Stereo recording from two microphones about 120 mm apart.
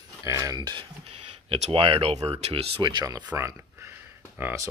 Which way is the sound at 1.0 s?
55° right (ahead or behind).